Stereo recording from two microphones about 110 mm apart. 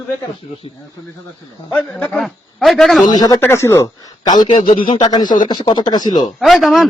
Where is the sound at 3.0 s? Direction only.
35° left (ahead or behind).